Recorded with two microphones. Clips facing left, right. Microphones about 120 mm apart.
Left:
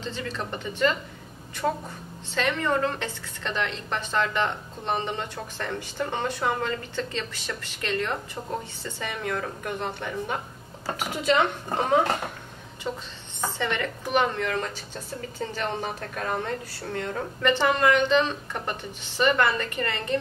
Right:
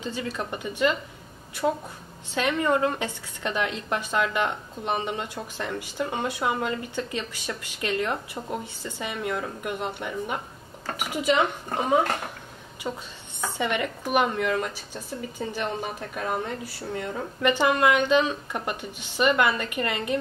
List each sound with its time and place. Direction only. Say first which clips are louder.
0.0 s a woman's voice: right 2 dB; 10° right (ahead or behind)